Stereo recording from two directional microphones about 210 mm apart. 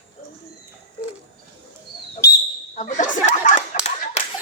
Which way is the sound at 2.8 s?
35° left (ahead or behind).